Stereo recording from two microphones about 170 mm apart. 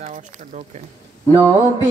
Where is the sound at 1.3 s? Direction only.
15° right (ahead or behind).